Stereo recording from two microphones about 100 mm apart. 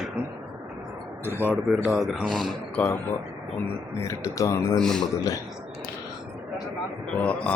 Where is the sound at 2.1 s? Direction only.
5° left (ahead or behind).